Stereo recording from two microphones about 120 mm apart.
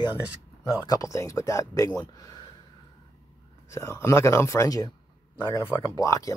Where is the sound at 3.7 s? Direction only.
25° left (ahead or behind).